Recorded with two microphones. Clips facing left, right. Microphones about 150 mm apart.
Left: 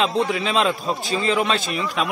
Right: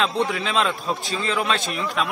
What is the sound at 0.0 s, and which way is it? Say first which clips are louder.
A man's voice: left 2 dB; centre (ahead or behind).